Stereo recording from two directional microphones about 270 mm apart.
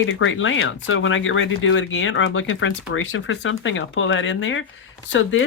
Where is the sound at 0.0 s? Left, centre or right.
Left.